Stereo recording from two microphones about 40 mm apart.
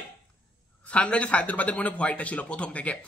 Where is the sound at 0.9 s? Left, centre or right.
Left.